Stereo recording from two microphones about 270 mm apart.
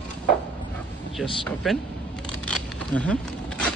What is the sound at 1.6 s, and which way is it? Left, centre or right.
Speech, centre.